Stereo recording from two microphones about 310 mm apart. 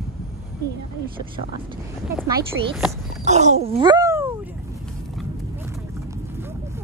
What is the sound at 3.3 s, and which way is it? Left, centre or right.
Speech, right.